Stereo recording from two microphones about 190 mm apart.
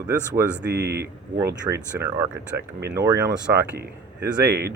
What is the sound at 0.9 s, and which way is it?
Speech, 60° right (ahead or behind).